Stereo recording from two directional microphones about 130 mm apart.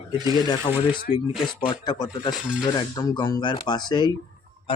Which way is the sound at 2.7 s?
30° left (ahead or behind).